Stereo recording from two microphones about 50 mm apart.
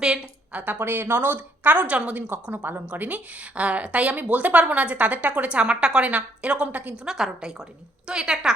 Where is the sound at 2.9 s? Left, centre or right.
Right.